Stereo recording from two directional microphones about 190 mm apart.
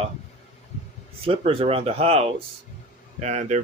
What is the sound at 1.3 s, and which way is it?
A man's voice, 30° right (ahead or behind).